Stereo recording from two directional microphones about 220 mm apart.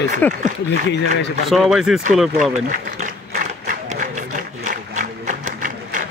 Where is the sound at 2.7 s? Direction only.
35° right (ahead or behind).